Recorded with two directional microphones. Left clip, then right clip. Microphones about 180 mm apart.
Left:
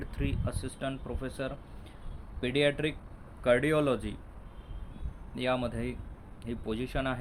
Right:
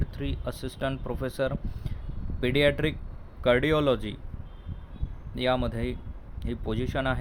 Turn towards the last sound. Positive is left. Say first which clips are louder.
# right 4 dB
turn(degrees=-20)  # may be behind; listen again after turning